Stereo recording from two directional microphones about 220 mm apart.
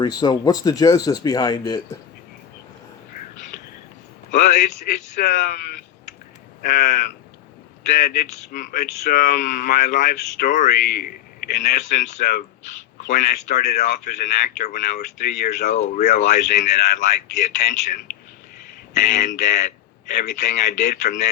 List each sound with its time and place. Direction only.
0.0 s speech: 20° left (ahead or behind)
4.3 s a man's voice: 35° left (ahead or behind)
6.6 s speech: 40° left (ahead or behind)
18.9 s speech: 35° left (ahead or behind)